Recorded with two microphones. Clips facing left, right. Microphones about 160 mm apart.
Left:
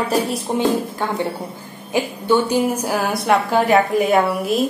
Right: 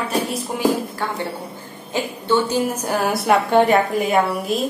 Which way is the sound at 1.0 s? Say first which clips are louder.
Left 3 dB; 15° left (ahead or behind).